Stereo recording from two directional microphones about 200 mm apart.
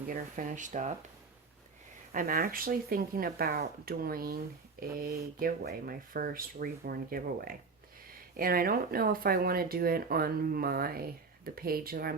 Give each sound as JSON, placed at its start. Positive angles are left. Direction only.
{"t": 0.1, "sound": "speech", "side_deg": -40}
{"t": 2.1, "sound": "speech", "side_deg": -45}